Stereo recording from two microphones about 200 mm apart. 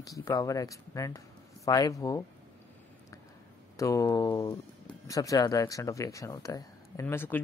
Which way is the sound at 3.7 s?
15° left (ahead or behind).